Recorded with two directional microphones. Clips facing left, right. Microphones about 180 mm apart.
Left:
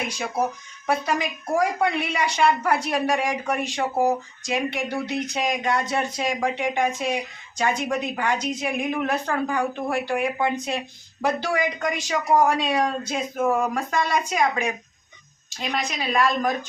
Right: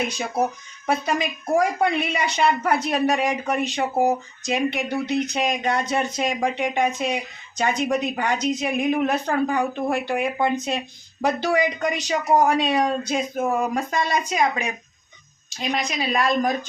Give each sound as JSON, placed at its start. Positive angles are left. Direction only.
{"t": 0.1, "sound": "speech", "side_deg": -20}
{"t": 15.7, "sound": "speech", "side_deg": -20}